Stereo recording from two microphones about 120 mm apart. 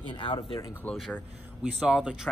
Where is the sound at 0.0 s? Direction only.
45° left (ahead or behind).